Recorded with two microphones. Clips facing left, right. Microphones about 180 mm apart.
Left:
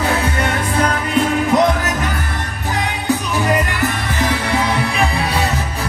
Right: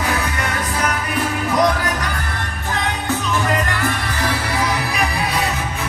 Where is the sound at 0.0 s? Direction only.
30° left (ahead or behind).